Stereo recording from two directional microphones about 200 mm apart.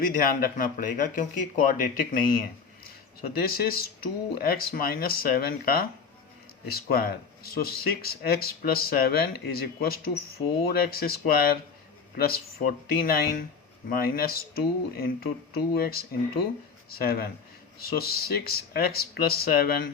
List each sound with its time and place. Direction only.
0.0 s speech: 45° left (ahead or behind)